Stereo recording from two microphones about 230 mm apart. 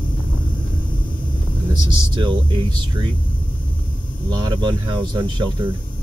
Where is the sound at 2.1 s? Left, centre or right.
Right.